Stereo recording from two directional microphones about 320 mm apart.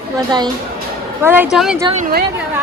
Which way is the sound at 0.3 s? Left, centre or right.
Centre.